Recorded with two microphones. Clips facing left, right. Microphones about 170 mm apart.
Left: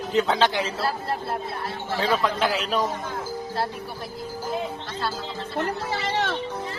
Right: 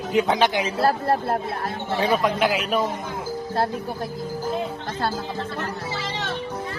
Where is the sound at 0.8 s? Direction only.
50° right (ahead or behind).